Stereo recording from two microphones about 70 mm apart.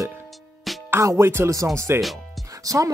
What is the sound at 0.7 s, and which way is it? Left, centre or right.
Music, centre.